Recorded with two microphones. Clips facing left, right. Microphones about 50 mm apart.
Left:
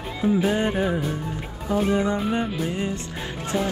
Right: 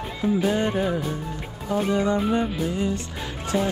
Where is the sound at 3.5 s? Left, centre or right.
Centre.